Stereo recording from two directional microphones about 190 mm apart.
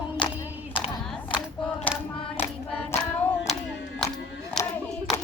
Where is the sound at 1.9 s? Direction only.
10° left (ahead or behind).